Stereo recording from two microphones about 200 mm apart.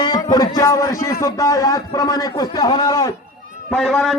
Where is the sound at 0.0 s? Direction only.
20° left (ahead or behind).